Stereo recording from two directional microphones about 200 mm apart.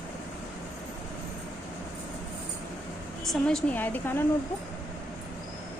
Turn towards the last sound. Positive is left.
turn(degrees=10)  # may be behind; listen again after turning